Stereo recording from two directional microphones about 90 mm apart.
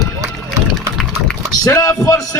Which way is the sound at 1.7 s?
40° left (ahead or behind).